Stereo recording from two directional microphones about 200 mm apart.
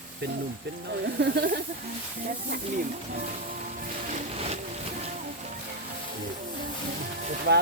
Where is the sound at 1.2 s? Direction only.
50° right (ahead or behind).